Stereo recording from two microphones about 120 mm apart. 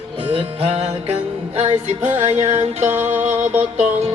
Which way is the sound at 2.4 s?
75° right (ahead or behind).